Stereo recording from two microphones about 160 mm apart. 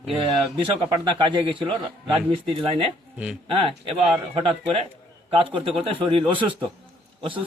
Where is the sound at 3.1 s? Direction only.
5° right (ahead or behind).